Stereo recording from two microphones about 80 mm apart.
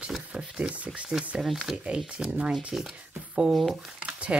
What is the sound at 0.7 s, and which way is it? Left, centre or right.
Speech, centre.